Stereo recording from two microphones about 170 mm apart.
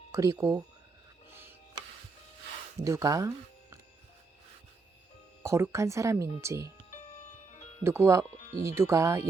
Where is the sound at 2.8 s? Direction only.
20° right (ahead or behind).